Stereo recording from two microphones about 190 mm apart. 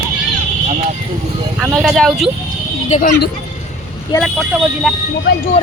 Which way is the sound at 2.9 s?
50° left (ahead or behind).